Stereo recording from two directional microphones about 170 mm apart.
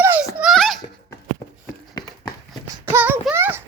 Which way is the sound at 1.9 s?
25° left (ahead or behind).